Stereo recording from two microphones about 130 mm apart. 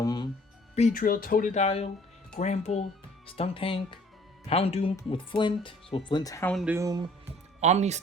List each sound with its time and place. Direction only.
0.0 s music: 30° left (ahead or behind)
0.9 s speech: 90° left
1.6 s speech: 50° left (ahead or behind)
3.2 s speech: 45° left (ahead or behind); by 6.4 s 30° left (ahead or behind)
6.7 s speech: 25° right (ahead or behind)
7.6 s speech: 60° right (ahead or behind)